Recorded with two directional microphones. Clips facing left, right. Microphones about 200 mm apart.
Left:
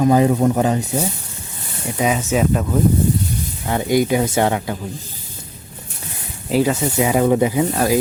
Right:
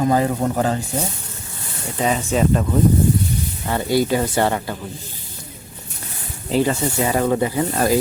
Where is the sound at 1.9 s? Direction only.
5° left (ahead or behind).